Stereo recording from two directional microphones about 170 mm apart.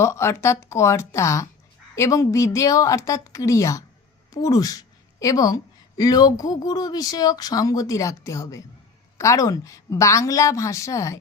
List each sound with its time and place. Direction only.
0.0 s a woman's voice: 15° left (ahead or behind)